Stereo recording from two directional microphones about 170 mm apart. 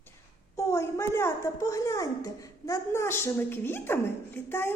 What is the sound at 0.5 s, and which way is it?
A woman's voice, 15° left (ahead or behind).